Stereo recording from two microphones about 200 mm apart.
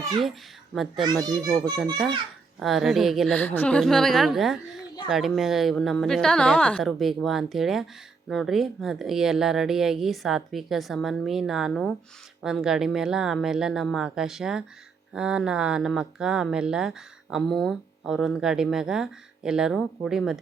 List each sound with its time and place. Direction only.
0.2 s speech: centre (ahead or behind)
1.0 s a child's voice: 20° right (ahead or behind)
2.6 s speech: centre (ahead or behind)